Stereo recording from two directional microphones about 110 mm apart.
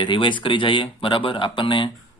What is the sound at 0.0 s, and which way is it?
Speech, 45° left (ahead or behind).